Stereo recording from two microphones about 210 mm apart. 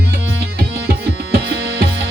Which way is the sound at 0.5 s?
50° right (ahead or behind).